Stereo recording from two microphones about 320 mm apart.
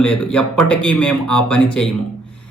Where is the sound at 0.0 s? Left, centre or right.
Centre.